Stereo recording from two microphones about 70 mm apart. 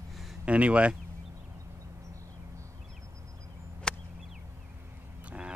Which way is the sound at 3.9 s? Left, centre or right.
Centre.